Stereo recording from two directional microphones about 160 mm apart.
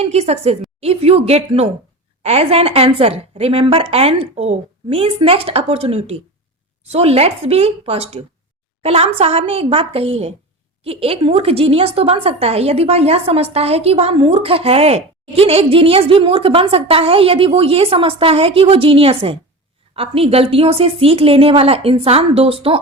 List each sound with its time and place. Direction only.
0.0 s a woman's voice: 40° right (ahead or behind)